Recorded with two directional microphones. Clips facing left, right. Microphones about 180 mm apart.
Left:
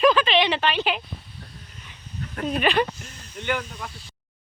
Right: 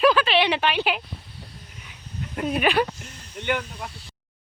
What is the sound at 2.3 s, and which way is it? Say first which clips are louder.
Speech: right 1 dB; 10° right (ahead or behind).